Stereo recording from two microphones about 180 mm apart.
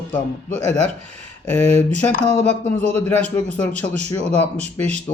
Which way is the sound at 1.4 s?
35° right (ahead or behind).